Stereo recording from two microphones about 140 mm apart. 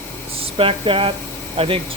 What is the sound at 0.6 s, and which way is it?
Speech, 40° right (ahead or behind).